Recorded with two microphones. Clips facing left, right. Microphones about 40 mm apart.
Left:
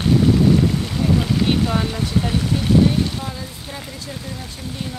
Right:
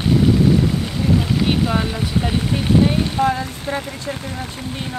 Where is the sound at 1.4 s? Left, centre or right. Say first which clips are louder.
Right 1 dB; centre.